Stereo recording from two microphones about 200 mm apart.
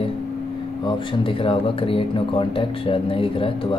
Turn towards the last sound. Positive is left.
turn(degrees=25)  # may be behind; listen again after turning